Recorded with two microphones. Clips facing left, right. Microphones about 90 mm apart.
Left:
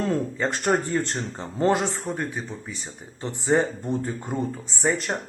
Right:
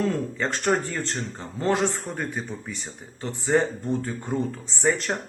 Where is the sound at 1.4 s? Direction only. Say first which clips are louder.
Left 5 dB; 30° left (ahead or behind).